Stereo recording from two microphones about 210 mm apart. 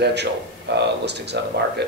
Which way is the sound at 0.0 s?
55° right (ahead or behind).